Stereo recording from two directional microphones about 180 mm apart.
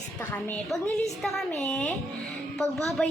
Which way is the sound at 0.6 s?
Centre (ahead or behind).